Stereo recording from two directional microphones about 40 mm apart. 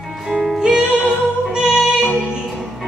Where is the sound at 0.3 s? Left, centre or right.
Centre.